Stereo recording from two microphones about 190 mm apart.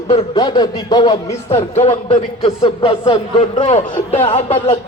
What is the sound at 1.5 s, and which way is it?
Speech, 30° left (ahead or behind).